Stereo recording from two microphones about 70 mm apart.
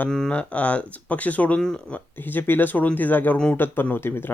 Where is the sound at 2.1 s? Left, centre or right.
Left.